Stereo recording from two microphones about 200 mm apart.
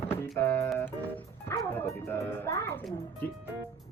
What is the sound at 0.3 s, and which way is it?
Speech, 10° left (ahead or behind).